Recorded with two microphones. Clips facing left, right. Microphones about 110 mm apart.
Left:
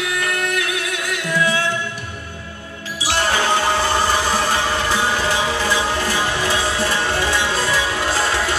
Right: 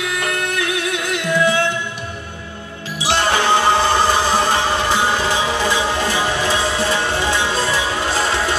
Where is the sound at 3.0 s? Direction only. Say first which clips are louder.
Right 2 dB; 25° right (ahead or behind).